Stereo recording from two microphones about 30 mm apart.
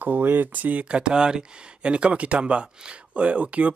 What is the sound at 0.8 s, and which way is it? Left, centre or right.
Speech, right.